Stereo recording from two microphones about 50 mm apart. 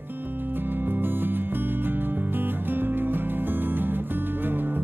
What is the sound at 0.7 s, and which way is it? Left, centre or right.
Music, right.